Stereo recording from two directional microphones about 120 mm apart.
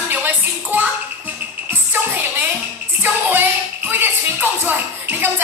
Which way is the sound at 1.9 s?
15° right (ahead or behind).